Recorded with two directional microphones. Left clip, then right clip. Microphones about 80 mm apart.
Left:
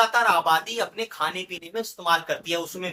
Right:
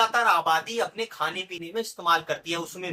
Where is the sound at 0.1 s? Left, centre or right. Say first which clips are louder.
Left 2 dB; left.